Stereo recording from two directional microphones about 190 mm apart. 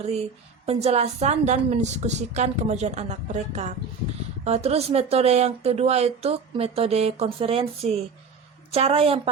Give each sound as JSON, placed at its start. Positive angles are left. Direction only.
{"t": 0.6, "sound": "a woman's voice", "side_deg": -35}